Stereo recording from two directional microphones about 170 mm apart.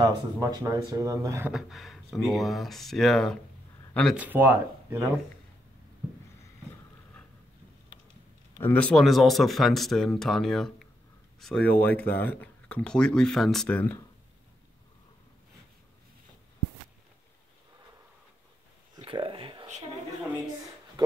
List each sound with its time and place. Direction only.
0.0 s speech: 20° right (ahead or behind)
1.5 s speech: centre (ahead or behind)
4.2 s speech: 10° right (ahead or behind)
8.5 s speech: 10° left (ahead or behind)
18.9 s a sound: 30° right (ahead or behind)